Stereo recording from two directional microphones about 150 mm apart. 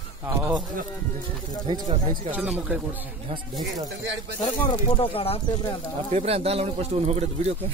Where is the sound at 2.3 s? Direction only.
10° right (ahead or behind).